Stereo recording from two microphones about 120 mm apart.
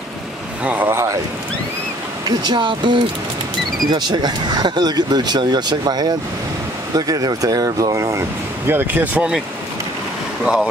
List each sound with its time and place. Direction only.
0.7 s speech: 20° right (ahead or behind)
2.2 s speech: 40° right (ahead or behind); by 9.3 s 15° right (ahead or behind)
10.4 s speech: 5° right (ahead or behind)